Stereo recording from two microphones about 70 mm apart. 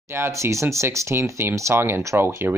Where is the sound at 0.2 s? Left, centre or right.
Right.